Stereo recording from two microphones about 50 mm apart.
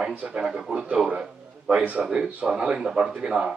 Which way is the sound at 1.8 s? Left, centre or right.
Right.